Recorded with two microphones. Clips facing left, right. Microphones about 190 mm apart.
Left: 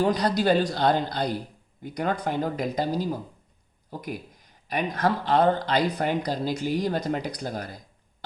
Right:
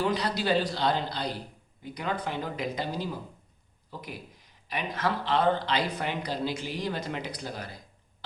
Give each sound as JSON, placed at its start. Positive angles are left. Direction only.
{"t": 0.0, "sound": "a man's voice", "side_deg": 40}